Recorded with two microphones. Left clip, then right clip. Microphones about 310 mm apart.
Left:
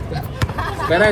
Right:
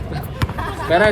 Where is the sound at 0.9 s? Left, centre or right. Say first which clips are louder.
Right 1 dB; centre.